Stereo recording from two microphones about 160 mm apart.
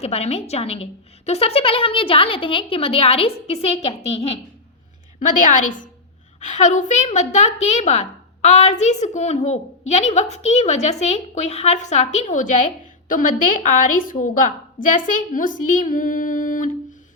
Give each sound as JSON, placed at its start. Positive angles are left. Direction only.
{"t": 0.0, "sound": "a woman's voice", "side_deg": 40}
{"t": 5.2, "sound": "a woman's voice", "side_deg": 55}